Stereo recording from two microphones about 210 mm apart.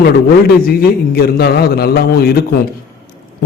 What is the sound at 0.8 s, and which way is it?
A man's voice, 50° left (ahead or behind).